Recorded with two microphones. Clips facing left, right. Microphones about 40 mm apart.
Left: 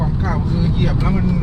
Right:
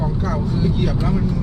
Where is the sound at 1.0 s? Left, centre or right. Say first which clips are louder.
Left 2 dB; left.